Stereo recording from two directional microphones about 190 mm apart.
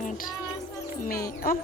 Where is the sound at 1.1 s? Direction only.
50° left (ahead or behind).